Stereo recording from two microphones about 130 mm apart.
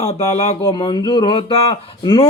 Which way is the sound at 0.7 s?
35° left (ahead or behind).